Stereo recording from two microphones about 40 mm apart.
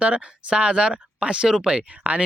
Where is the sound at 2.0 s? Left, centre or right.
Right.